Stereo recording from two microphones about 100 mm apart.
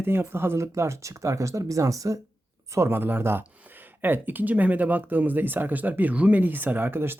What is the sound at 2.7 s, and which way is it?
Speech, 25° right (ahead or behind).